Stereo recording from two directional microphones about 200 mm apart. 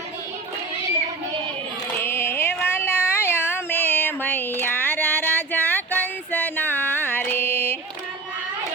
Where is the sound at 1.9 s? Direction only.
10° left (ahead or behind).